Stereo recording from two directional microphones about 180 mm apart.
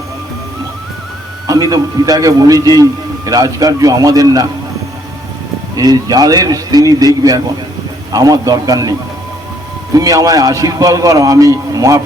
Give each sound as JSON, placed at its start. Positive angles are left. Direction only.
{"t": 1.5, "sound": "a man's voice", "side_deg": -20}
{"t": 5.7, "sound": "a man's voice", "side_deg": -20}